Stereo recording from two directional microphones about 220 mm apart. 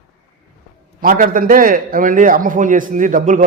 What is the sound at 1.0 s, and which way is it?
A man's voice, 40° right (ahead or behind).